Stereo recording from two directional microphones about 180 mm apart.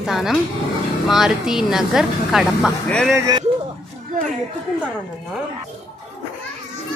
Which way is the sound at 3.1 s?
20° right (ahead or behind).